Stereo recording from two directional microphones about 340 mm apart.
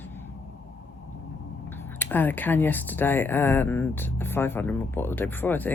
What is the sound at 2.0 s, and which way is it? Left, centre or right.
Speech, centre.